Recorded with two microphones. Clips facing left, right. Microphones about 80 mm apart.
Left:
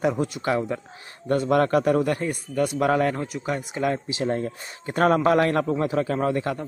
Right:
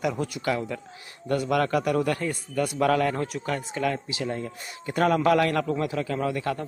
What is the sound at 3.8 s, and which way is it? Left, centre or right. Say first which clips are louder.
A man's voice: left 4 dB; left.